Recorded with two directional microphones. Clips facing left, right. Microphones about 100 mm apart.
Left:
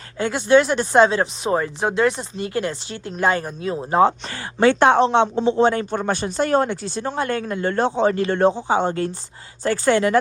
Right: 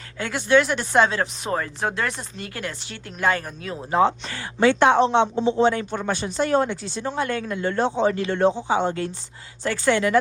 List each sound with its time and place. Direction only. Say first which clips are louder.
0.2 s speech: left 3 dB; 25° left (ahead or behind)
3.9 s speech: left 2 dB; 40° left (ahead or behind)